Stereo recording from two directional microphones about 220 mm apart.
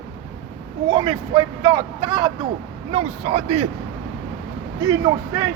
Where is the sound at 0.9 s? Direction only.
20° right (ahead or behind).